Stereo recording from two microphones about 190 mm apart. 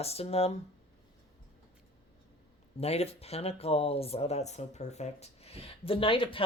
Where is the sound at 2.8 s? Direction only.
35° left (ahead or behind).